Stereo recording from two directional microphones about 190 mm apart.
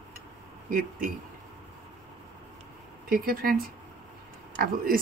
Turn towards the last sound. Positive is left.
turn(degrees=-50)  # may be behind; listen again after turning